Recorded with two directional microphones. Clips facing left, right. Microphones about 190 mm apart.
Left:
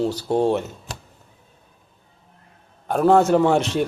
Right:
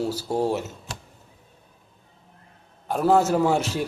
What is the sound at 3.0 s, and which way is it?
Speech, 5° right (ahead or behind).